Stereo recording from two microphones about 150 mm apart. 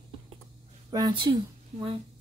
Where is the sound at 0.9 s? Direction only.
30° right (ahead or behind).